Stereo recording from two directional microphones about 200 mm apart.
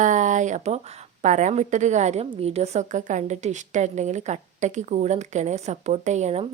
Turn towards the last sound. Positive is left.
turn(degrees=-35)  # may be behind; listen again after turning